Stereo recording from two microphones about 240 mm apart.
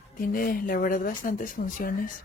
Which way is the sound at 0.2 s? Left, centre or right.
Left.